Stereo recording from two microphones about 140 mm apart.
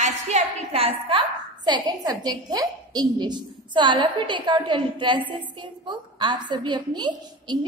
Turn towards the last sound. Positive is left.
turn(degrees=-30)  # may be behind; listen again after turning